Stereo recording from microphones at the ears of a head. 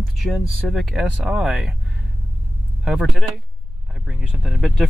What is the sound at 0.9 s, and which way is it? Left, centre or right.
Speech, centre.